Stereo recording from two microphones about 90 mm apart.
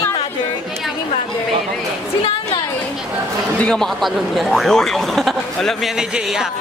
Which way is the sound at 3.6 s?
5° left (ahead or behind).